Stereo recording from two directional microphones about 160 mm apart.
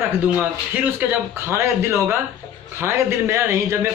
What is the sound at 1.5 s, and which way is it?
A man's voice, 15° right (ahead or behind).